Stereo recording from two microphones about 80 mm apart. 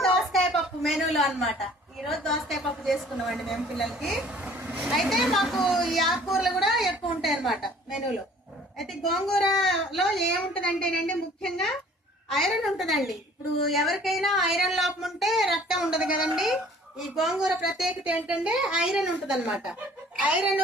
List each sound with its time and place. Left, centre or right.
0.0 s a sound: centre
2.0 s a woman's voice: centre
4.3 s vehicle: centre
4.9 s a woman's voice: centre
10.5 s a woman's voice: centre
20.1 s speech: centre